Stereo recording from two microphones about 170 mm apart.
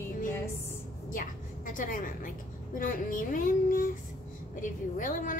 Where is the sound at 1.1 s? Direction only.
50° left (ahead or behind).